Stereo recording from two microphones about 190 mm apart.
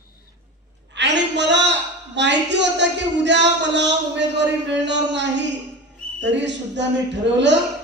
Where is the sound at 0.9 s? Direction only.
65° right (ahead or behind).